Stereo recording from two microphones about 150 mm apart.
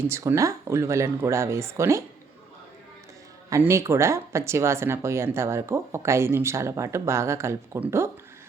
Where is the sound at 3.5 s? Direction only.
20° right (ahead or behind).